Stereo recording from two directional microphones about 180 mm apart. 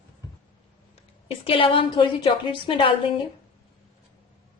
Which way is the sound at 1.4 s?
30° left (ahead or behind).